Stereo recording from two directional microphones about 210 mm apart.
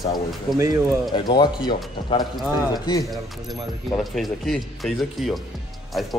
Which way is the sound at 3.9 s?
Centre (ahead or behind).